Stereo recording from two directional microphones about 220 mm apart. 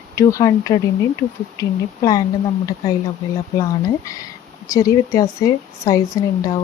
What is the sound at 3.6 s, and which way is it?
Speech, 15° left (ahead or behind).